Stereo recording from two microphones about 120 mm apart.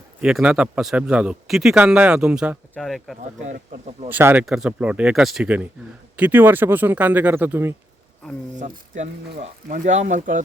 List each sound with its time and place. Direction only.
0.2 s a man's voice: 5° right (ahead or behind)
3.4 s speech: 90° right
4.1 s a man's voice: 15° right (ahead or behind)
4.4 s a man's voice: 5° right (ahead or behind)
8.5 s speech: 90° right